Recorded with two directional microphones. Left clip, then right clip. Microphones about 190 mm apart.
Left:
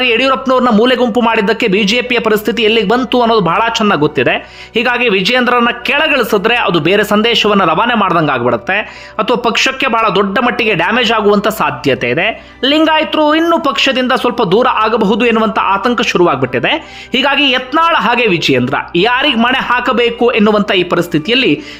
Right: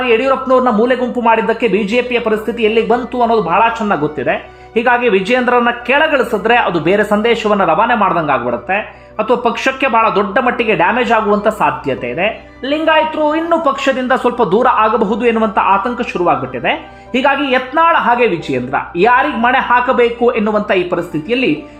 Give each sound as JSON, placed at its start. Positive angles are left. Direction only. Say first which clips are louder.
{"t": 0.0, "sound": "a man's voice", "louder": "left 2 dB", "side_deg": 20}